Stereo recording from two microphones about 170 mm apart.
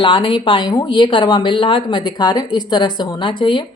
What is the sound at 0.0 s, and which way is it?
Speech, 30° left (ahead or behind).